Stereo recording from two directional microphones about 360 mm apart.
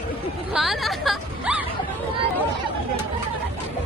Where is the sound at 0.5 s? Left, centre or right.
Centre.